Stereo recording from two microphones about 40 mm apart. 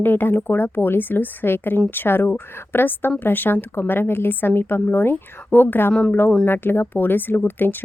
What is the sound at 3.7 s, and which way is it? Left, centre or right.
Speech, left.